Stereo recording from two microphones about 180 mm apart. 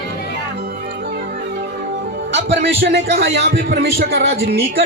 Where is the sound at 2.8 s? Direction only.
85° right.